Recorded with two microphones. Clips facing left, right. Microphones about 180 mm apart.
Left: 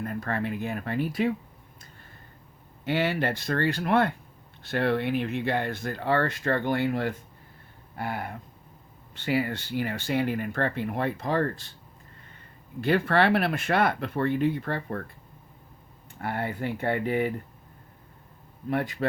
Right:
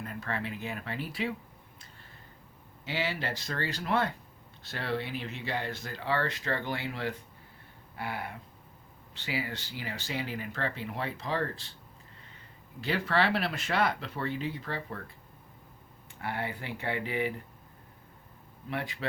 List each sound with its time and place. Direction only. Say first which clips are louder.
0.0 s speech: left 6 dB; 50° left (ahead or behind)
2.8 s speech: left 8 dB; 55° left (ahead or behind)
12.8 s speech: left 6 dB; 55° left (ahead or behind)
16.1 s speech: left 5 dB; 50° left (ahead or behind)
18.7 s speech: left 8 dB; 50° left (ahead or behind)